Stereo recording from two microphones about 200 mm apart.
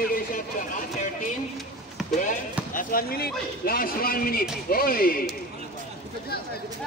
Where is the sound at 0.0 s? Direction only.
45° left (ahead or behind).